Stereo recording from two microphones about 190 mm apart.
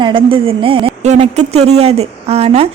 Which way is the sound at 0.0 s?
25° right (ahead or behind).